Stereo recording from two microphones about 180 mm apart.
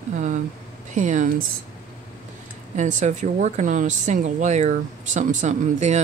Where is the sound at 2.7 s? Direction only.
40° right (ahead or behind).